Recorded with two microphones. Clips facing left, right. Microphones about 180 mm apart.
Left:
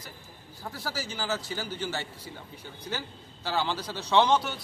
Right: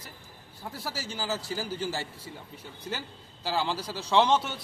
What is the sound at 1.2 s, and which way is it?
Speech, 30° right (ahead or behind).